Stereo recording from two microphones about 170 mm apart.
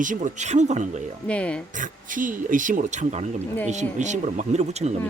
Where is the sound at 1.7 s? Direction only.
50° right (ahead or behind).